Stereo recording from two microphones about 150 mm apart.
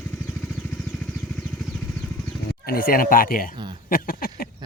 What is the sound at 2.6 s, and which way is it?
Speech, 75° left (ahead or behind).